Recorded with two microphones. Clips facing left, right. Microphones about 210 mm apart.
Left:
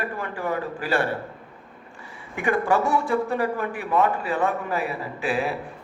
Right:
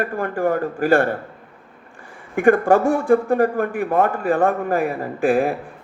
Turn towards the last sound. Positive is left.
turn(degrees=-50)  # may be behind; listen again after turning